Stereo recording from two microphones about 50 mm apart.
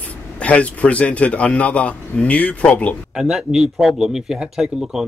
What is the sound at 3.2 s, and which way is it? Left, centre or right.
Speech, centre.